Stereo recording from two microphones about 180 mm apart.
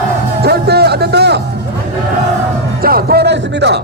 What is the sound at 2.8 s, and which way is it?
Speech, 55° right (ahead or behind).